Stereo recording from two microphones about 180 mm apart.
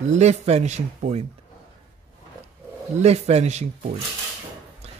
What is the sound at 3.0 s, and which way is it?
Speech, 35° right (ahead or behind).